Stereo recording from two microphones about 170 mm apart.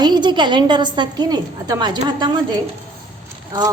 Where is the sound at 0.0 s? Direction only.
25° right (ahead or behind).